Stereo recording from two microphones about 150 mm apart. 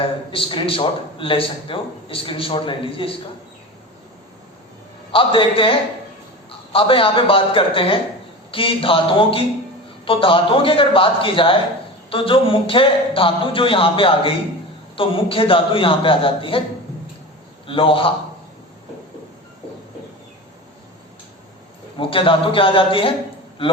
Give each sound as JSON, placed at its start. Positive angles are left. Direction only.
{"t": 0.0, "sound": "a man's voice", "side_deg": 35}
{"t": 5.1, "sound": "a man's voice", "side_deg": 35}
{"t": 6.7, "sound": "a man's voice", "side_deg": 35}
{"t": 17.7, "sound": "a man's voice", "side_deg": 35}
{"t": 21.9, "sound": "a man's voice", "side_deg": 35}